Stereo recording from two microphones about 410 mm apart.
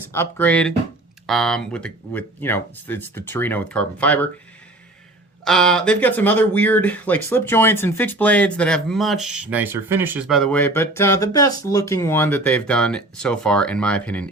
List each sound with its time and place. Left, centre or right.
0.1 s speech: centre
5.5 s speech: centre